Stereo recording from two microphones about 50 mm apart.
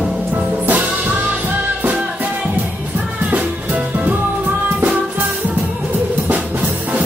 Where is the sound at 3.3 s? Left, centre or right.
Right.